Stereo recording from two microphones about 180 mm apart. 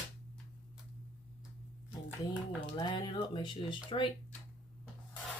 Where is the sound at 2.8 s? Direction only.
25° left (ahead or behind).